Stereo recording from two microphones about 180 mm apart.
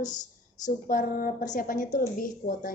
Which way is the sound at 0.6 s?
50° left (ahead or behind).